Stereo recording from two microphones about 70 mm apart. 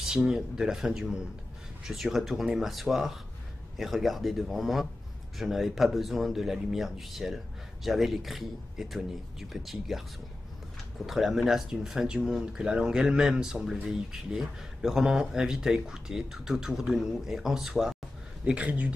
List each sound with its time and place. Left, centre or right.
0.0 s speech: centre
11.1 s speech: centre
18.4 s speech: centre